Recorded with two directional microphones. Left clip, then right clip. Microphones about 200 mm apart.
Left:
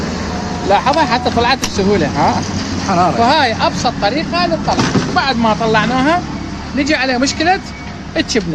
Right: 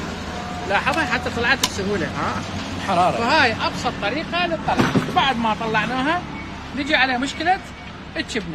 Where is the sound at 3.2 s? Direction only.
25° left (ahead or behind).